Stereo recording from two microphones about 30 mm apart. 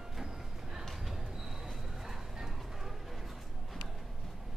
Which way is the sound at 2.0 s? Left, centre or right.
Centre.